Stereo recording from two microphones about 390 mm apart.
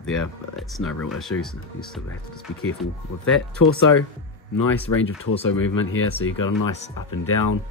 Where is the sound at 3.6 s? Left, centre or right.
Left.